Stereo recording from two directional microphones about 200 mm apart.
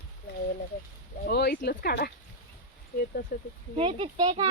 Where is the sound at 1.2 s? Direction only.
50° left (ahead or behind).